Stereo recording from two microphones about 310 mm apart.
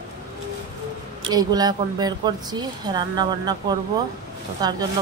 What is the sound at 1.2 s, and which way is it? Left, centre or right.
Speech, centre.